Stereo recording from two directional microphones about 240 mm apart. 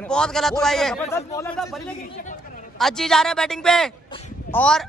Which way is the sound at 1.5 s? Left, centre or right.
Centre.